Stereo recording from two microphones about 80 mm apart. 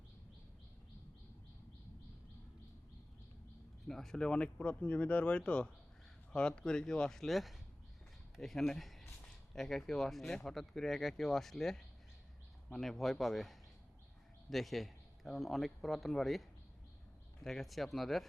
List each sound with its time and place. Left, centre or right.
3.8 s speech: centre